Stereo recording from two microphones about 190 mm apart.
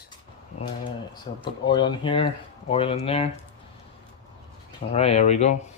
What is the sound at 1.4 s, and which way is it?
Speech, 25° left (ahead or behind).